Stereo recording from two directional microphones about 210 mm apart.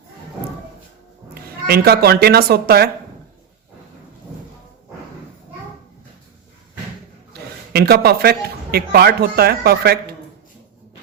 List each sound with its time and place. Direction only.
1.6 s a woman's voice: 50° right (ahead or behind)
7.3 s speech: 50° right (ahead or behind)